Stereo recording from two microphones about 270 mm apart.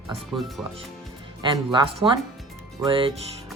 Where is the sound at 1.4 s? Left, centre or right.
Centre.